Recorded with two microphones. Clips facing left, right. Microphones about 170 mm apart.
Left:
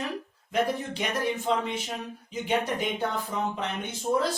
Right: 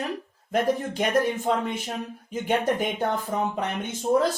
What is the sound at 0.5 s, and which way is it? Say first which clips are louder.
Speech: right 3 dB; 50° right (ahead or behind).